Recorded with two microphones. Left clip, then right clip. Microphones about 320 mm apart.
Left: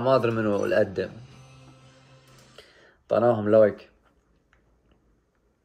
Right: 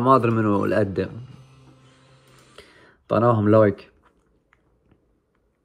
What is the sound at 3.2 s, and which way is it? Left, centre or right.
Speech, right.